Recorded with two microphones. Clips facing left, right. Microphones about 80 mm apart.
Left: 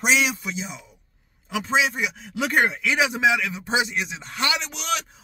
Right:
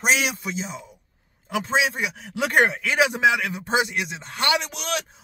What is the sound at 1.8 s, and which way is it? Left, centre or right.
Speech, right.